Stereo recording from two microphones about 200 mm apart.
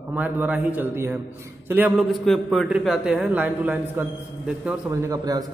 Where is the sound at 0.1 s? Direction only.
10° right (ahead or behind).